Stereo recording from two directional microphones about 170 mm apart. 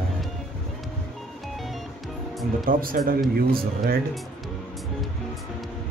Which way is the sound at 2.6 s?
55° right (ahead or behind).